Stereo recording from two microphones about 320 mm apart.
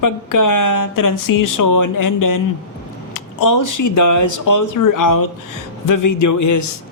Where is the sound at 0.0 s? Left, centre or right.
Left.